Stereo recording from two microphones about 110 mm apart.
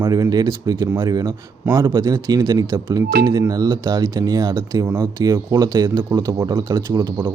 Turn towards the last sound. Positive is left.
turn(degrees=-40)  # may be behind; listen again after turning